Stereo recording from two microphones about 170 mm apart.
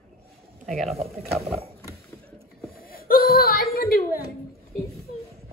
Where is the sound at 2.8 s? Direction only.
60° left (ahead or behind).